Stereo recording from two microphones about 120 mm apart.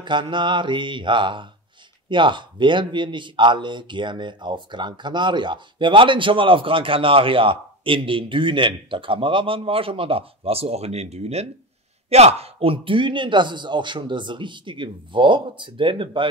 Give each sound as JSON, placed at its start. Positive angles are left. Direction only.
{"t": 0.0, "sound": "speech", "side_deg": -40}